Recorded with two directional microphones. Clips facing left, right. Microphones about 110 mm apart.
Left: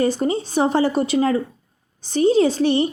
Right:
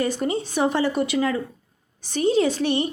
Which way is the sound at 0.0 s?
35° left (ahead or behind).